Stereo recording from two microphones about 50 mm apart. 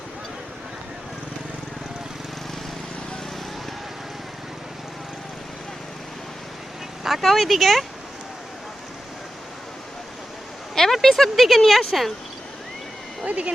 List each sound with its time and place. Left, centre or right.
7.2 s speech: centre
10.8 s speech: centre
13.2 s speech: right